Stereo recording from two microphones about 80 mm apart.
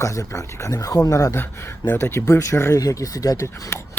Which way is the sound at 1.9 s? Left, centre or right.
Left.